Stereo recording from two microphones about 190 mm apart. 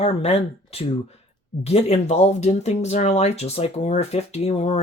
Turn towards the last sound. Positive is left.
turn(degrees=35)  # may be behind; listen again after turning